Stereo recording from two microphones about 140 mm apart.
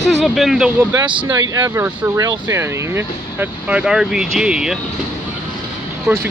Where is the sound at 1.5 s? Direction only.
20° right (ahead or behind); by 4.7 s 5° right (ahead or behind).